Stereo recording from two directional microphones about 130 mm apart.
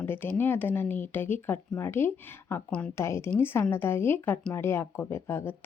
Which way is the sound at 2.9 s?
20° left (ahead or behind).